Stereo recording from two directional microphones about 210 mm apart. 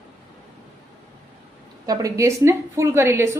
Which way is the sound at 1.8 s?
15° right (ahead or behind).